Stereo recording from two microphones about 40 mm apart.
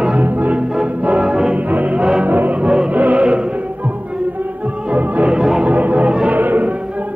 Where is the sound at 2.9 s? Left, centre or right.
Right.